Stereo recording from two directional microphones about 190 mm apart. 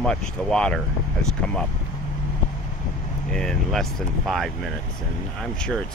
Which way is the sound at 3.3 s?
5° left (ahead or behind).